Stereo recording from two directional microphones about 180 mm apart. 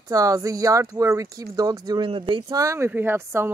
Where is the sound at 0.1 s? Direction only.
20° right (ahead or behind).